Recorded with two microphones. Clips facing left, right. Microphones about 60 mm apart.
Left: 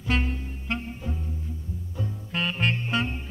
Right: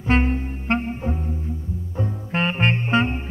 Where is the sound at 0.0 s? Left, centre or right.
Right.